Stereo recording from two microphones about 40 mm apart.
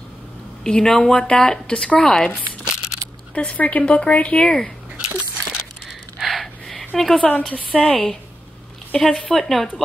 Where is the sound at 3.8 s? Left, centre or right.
Left.